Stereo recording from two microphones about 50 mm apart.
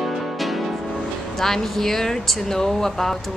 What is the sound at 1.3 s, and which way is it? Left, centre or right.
A woman's voice, centre.